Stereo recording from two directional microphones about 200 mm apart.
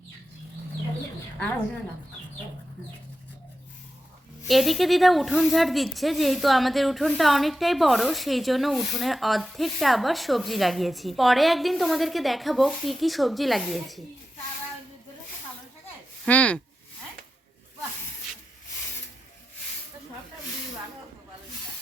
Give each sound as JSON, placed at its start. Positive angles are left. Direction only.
{"t": 4.4, "sound": "speech", "side_deg": 0}
{"t": 16.2, "sound": "speech", "side_deg": 5}